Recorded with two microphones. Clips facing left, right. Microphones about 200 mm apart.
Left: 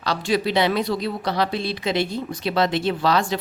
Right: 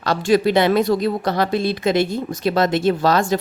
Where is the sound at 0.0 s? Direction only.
50° right (ahead or behind).